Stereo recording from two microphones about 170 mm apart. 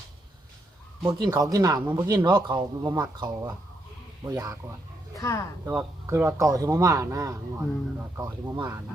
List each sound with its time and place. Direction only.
1.0 s speech: 20° right (ahead or behind)
5.1 s speech: 20° left (ahead or behind)
5.6 s speech: 15° right (ahead or behind)
7.6 s speech: 10° right (ahead or behind)